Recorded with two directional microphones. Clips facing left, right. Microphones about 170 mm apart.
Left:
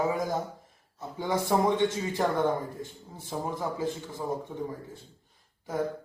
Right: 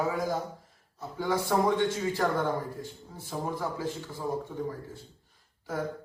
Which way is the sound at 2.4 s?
20° left (ahead or behind).